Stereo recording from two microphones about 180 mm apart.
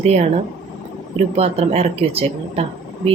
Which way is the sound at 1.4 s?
35° right (ahead or behind).